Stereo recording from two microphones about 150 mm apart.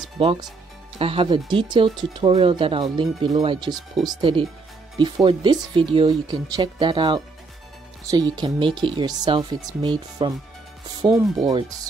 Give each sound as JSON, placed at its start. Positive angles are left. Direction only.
{"t": 0.2, "sound": "speech", "side_deg": -35}
{"t": 11.4, "sound": "speech", "side_deg": -25}